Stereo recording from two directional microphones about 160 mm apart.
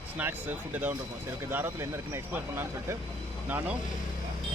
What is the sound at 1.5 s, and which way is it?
Speech, 15° right (ahead or behind).